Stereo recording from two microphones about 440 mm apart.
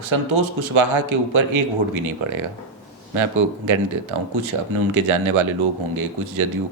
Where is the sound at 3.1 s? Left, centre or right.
Right.